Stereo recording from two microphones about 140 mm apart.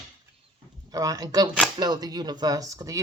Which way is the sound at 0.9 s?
25° right (ahead or behind).